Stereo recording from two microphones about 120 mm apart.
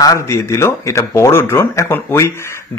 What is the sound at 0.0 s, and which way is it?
Speech, 25° left (ahead or behind).